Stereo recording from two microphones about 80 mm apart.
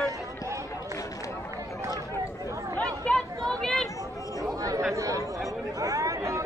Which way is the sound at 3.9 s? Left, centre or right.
Left.